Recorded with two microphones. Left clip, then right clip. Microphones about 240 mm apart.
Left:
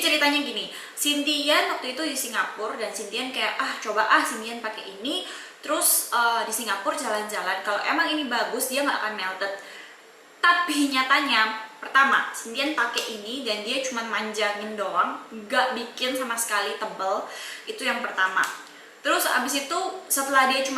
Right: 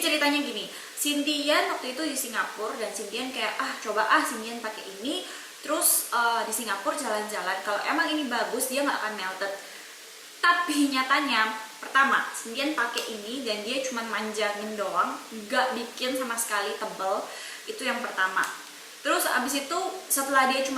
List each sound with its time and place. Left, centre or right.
0.0 s a woman's voice: centre
2.6 s a woman's voice: right
2.8 s a woman's voice: centre
5.8 s a woman's voice: right
6.2 s a woman's voice: centre
10.5 s a woman's voice: centre
15.4 s a woman's voice: centre
17.7 s a woman's voice: centre
20.4 s a woman's voice: centre